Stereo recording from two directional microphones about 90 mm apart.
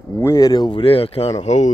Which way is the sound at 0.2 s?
30° left (ahead or behind).